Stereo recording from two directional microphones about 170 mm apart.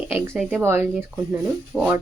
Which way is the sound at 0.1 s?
5° right (ahead or behind).